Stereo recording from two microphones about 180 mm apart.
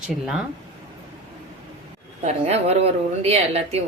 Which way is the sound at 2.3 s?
35° right (ahead or behind).